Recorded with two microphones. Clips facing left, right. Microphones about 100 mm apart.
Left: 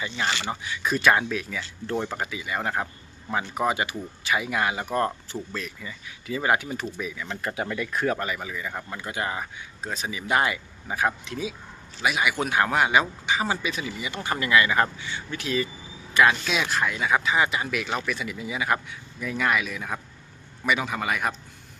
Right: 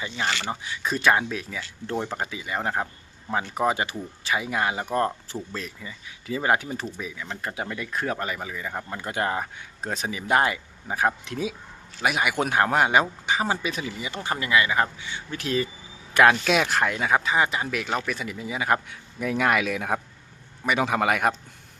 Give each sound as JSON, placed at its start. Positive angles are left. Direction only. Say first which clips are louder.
{"t": 0.3, "sound": "speech", "louder": "right 1 dB", "side_deg": 20}
{"t": 0.6, "sound": "speech", "louder": "left 2 dB", "side_deg": -30}
{"t": 6.9, "sound": "speech", "louder": "left 2 dB", "side_deg": -20}
{"t": 8.3, "sound": "speech", "louder": "even", "side_deg": -35}
{"t": 9.0, "sound": "speech", "louder": "right 4 dB", "side_deg": -45}
{"t": 11.3, "sound": "speech", "louder": "right 2 dB", "side_deg": -55}
{"t": 14.2, "sound": "speech", "louder": "left 1 dB", "side_deg": -25}
{"t": 15.3, "sound": "speech", "louder": "right 1 dB", "side_deg": -40}
{"t": 16.1, "sound": "speech", "louder": "right 3 dB", "side_deg": -55}
{"t": 19.2, "sound": "speech", "louder": "right 3 dB", "side_deg": -60}